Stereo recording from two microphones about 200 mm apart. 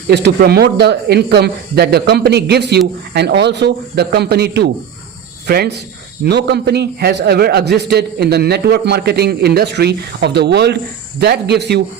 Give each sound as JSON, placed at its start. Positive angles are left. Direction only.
{"t": 0.1, "sound": "speech", "side_deg": -55}